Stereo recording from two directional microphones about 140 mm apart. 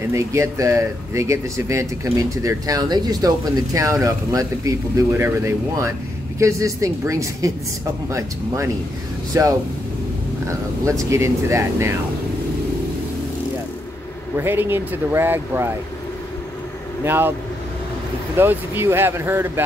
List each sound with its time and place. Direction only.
0.1 s speech: 20° right (ahead or behind)
10.9 s speech: 20° right (ahead or behind)
14.3 s speech: 15° right (ahead or behind)
17.0 s speech: 15° right (ahead or behind)
18.4 s speech: 15° right (ahead or behind)